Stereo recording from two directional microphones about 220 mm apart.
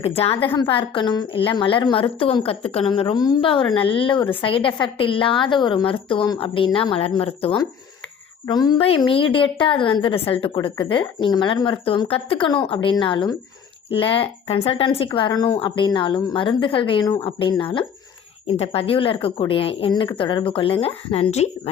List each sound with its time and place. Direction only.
0.0 s a woman's voice: 25° left (ahead or behind)